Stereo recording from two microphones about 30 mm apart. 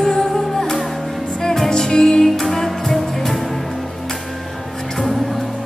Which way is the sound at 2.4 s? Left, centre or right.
Centre.